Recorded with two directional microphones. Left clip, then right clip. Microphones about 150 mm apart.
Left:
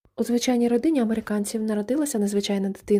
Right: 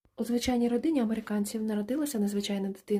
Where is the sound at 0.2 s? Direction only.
40° left (ahead or behind).